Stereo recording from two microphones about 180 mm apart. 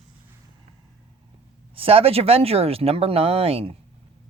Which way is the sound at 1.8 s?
30° right (ahead or behind).